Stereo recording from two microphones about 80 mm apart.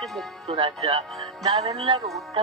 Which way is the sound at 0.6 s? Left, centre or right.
Right.